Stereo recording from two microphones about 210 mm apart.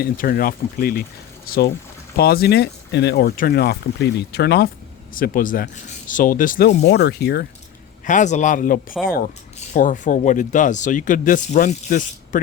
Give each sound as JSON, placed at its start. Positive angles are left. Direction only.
{"t": 0.0, "sound": "speech", "side_deg": 45}
{"t": 5.1, "sound": "speech", "side_deg": 40}
{"t": 8.0, "sound": "speech", "side_deg": 35}